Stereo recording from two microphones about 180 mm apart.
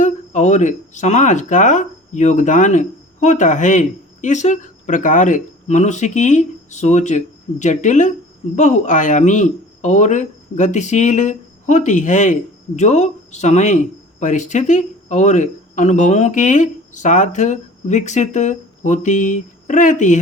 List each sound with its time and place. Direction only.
0.0 s speech: 40° left (ahead or behind)